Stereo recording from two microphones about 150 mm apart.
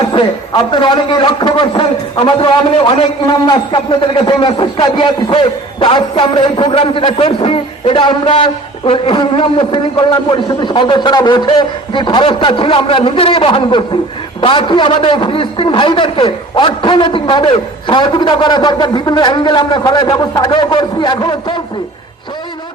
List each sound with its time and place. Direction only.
0.0 s a man's voice: 30° left (ahead or behind)